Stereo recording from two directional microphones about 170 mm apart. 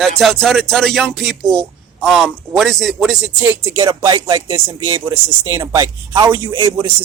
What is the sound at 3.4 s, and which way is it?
Speech, 10° right (ahead or behind).